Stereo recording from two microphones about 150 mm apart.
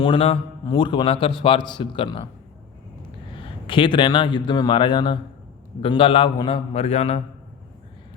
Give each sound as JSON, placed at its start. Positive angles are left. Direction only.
{"t": 0.0, "sound": "a man's voice", "side_deg": 35}
{"t": 3.3, "sound": "a man's voice", "side_deg": 35}